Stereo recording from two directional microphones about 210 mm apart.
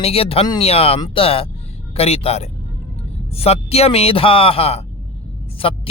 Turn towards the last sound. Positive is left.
turn(degrees=25)  # may be behind; listen again after turning